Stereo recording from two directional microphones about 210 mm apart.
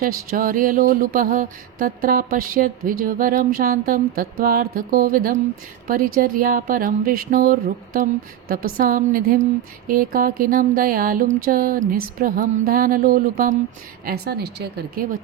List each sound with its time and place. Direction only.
0.0 s mantra: 45° right (ahead or behind)
5.9 s speech: 40° right (ahead or behind)
9.8 s mantra: 40° right (ahead or behind)